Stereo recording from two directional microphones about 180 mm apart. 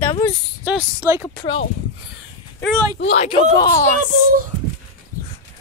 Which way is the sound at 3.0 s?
35° left (ahead or behind).